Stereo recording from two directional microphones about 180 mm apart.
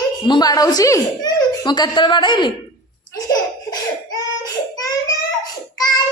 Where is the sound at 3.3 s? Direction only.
20° left (ahead or behind).